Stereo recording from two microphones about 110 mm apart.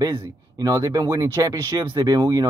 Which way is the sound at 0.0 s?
35° right (ahead or behind).